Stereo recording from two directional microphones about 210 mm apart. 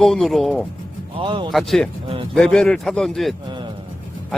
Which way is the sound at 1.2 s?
25° right (ahead or behind).